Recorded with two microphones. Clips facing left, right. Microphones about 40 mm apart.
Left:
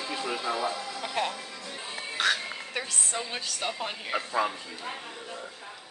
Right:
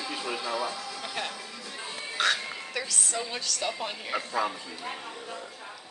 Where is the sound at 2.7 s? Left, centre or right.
Left.